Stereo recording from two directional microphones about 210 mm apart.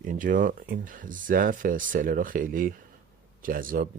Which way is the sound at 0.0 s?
40° right (ahead or behind).